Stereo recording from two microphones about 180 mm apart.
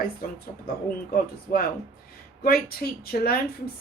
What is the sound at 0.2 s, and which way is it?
Speech, 55° left (ahead or behind).